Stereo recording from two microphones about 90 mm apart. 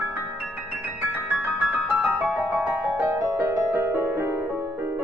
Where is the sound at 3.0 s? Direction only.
30° right (ahead or behind).